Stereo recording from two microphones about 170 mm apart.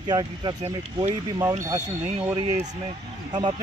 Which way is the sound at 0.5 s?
40° right (ahead or behind).